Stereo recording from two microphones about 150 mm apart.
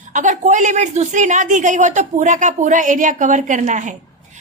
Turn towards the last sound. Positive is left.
turn(degrees=-55)  # may be behind; listen again after turning